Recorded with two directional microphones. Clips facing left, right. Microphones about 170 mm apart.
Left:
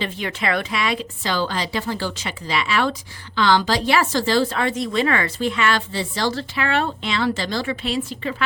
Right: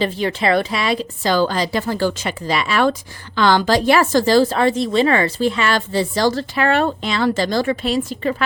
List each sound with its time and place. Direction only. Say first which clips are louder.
0.0 s a woman's voice: right 6 dB; 35° right (ahead or behind)